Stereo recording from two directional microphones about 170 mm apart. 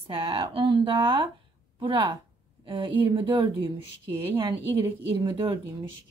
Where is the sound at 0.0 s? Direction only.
30° right (ahead or behind).